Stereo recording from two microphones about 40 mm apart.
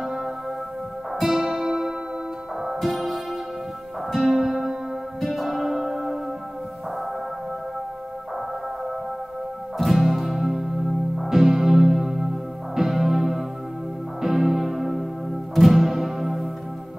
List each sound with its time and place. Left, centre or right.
0.0 s music: centre
5.7 s church bell: centre
9.8 s music: centre